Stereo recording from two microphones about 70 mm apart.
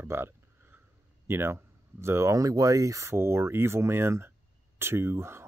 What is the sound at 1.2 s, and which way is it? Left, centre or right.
Speech, right.